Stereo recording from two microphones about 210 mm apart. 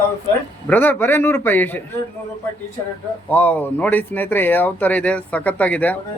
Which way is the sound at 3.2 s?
5° left (ahead or behind).